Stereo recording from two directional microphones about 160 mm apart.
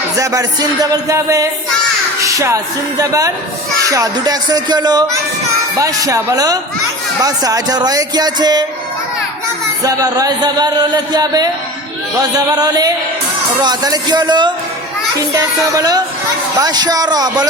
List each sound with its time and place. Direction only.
0.2 s speech: 20° right (ahead or behind)
2.2 s music: 20° right (ahead or behind)
3.0 s speech: 20° right (ahead or behind)
9.8 s speech: 20° right (ahead or behind)